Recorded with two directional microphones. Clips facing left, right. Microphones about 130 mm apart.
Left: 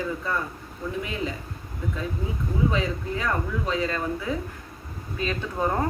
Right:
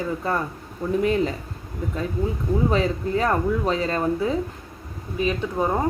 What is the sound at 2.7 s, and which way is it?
Speech, 40° right (ahead or behind).